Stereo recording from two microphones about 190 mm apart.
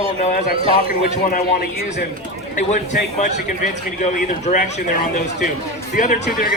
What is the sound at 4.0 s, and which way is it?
Speech, 40° left (ahead or behind).